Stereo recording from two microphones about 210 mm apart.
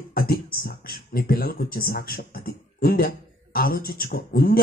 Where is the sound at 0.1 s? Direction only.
45° left (ahead or behind).